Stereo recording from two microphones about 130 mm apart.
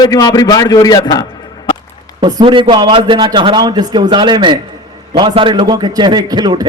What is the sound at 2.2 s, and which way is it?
A man's voice, 35° right (ahead or behind).